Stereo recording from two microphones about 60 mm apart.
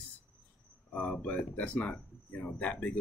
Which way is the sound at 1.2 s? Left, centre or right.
Left.